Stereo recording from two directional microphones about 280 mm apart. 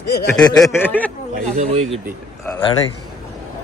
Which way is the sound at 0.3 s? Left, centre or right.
Centre.